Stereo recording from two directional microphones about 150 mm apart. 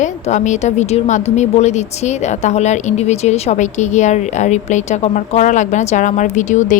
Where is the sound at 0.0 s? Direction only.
55° left (ahead or behind).